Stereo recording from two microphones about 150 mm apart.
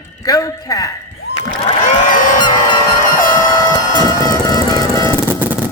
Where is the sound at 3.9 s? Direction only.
25° left (ahead or behind).